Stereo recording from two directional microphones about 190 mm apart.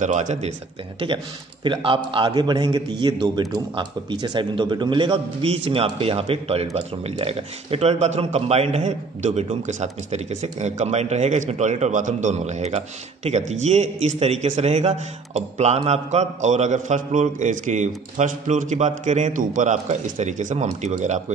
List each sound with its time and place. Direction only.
0.0 s speech: 40° right (ahead or behind)
0.9 s a man's voice: 25° right (ahead or behind)